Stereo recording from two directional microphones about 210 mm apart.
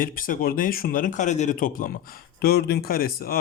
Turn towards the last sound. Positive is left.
turn(degrees=45)  # may be behind; listen again after turning